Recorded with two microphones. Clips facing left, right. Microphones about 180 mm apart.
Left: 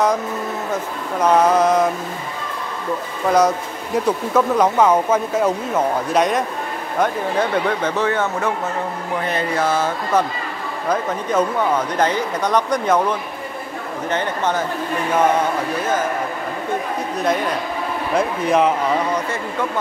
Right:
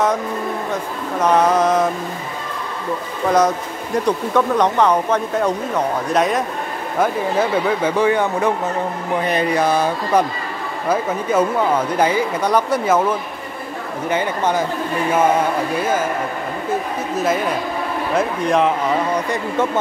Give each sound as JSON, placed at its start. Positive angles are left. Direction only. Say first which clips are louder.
{"t": 1.2, "sound": "speech", "louder": "left 1 dB", "side_deg": 0}
{"t": 3.3, "sound": "speech", "louder": "even", "side_deg": 0}
{"t": 14.0, "sound": "speech", "louder": "right 2 dB", "side_deg": -10}
{"t": 18.1, "sound": "speech", "louder": "even", "side_deg": 0}